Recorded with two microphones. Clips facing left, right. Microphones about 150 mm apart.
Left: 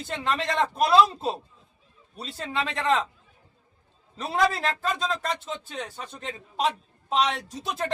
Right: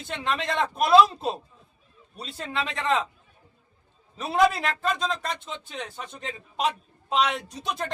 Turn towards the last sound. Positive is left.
turn(degrees=5)  # may be behind; listen again after turning